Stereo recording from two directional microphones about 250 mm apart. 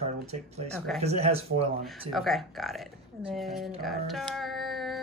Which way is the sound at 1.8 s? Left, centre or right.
Centre.